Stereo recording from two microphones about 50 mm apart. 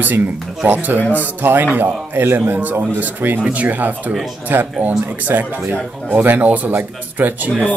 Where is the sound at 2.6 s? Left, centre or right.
Right.